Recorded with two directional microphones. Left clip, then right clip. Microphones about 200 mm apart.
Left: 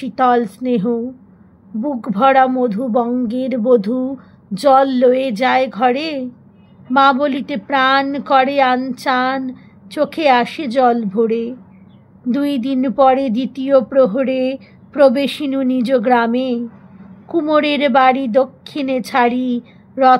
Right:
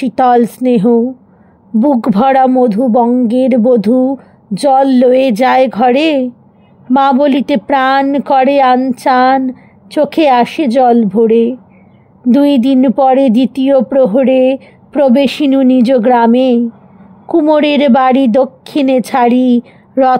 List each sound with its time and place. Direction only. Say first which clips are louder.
0.0 s a woman's voice: right 5 dB; 40° right (ahead or behind)